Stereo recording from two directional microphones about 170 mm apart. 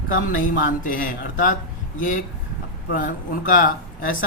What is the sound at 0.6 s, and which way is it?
Speech, 55° left (ahead or behind).